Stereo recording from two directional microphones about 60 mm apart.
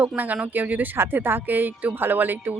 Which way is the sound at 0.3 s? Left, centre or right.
Right.